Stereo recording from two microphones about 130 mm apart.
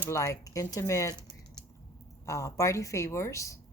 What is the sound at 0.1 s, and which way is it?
Speech, 25° left (ahead or behind).